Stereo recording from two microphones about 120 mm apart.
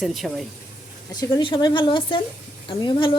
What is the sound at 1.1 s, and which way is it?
A woman's voice, 35° left (ahead or behind).